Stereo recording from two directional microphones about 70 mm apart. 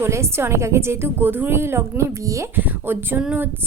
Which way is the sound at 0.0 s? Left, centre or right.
Right.